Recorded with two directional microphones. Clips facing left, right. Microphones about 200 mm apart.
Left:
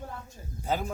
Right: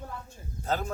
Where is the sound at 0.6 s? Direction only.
10° left (ahead or behind).